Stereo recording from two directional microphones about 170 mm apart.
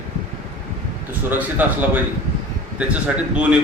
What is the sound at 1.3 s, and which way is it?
A man's voice, 10° right (ahead or behind).